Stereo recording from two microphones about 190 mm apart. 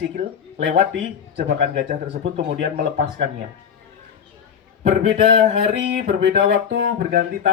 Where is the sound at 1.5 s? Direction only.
40° right (ahead or behind).